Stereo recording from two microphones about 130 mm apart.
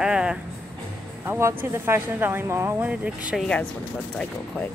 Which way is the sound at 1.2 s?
15° right (ahead or behind).